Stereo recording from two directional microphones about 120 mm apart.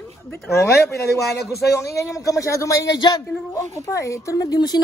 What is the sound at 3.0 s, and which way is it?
Speech, 35° left (ahead or behind).